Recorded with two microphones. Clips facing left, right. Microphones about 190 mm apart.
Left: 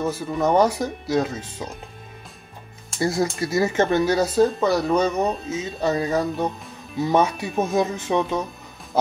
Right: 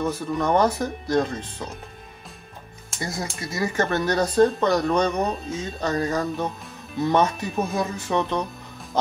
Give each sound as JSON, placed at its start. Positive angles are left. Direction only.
{"t": 0.0, "sound": "speech", "side_deg": 5}
{"t": 3.0, "sound": "speech", "side_deg": 30}
{"t": 3.9, "sound": "speech", "side_deg": 10}